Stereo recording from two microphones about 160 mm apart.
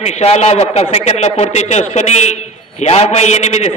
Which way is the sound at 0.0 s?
45° left (ahead or behind).